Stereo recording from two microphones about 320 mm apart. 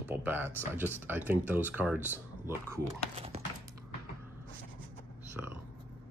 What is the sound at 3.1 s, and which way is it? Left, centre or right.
Clip-clop, centre.